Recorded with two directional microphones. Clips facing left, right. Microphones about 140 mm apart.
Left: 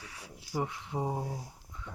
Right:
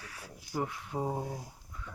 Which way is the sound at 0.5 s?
15° left (ahead or behind).